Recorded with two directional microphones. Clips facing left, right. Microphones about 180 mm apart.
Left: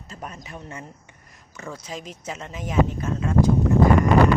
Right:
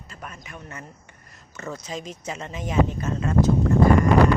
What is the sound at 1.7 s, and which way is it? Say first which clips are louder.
Speech: right 2 dB; 10° left (ahead or behind).